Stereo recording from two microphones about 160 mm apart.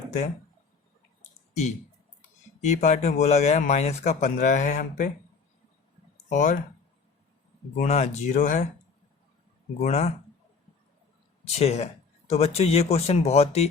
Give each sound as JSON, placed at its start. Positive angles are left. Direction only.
{"t": 2.6, "sound": "speech", "side_deg": 45}
{"t": 6.2, "sound": "speech", "side_deg": 50}
{"t": 7.8, "sound": "speech", "side_deg": 45}
{"t": 9.8, "sound": "speech", "side_deg": 40}
{"t": 11.4, "sound": "speech", "side_deg": 40}